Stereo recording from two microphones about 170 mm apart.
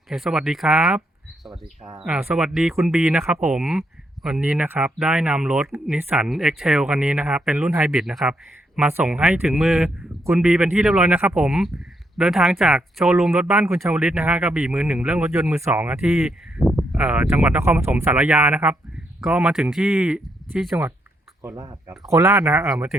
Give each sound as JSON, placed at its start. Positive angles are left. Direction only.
{"t": 0.1, "sound": "speech", "side_deg": -5}
{"t": 15.2, "sound": "speech", "side_deg": -15}
{"t": 21.4, "sound": "speech", "side_deg": -20}
{"t": 22.6, "sound": "speech", "side_deg": -5}